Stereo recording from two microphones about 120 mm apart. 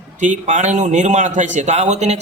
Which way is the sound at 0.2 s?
90° right.